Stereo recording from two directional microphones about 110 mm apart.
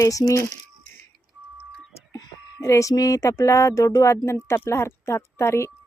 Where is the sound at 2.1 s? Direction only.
30° left (ahead or behind).